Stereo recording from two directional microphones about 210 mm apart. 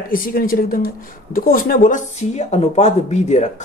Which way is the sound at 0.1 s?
45° left (ahead or behind).